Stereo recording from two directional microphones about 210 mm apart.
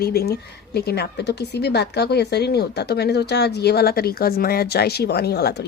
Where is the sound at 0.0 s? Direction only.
45° left (ahead or behind).